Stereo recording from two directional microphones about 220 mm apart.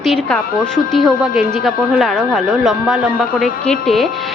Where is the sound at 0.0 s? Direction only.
Centre (ahead or behind).